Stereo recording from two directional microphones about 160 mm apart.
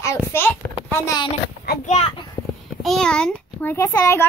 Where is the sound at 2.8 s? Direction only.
Centre (ahead or behind).